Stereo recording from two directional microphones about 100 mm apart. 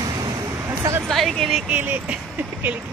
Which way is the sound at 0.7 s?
25° right (ahead or behind).